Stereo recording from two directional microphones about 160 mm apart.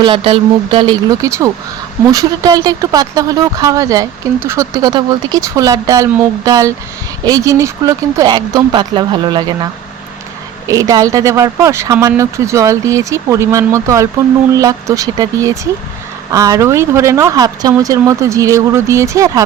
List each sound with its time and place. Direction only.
0.0 s speech: 35° right (ahead or behind)
1.1 s speech: 20° right (ahead or behind)
10.7 s speech: 20° right (ahead or behind)